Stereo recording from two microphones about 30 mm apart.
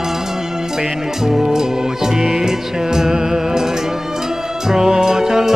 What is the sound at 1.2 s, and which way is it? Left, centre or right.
Music, centre.